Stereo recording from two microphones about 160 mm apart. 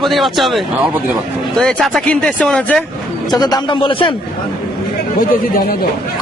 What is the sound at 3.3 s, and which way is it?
Speech, 25° left (ahead or behind).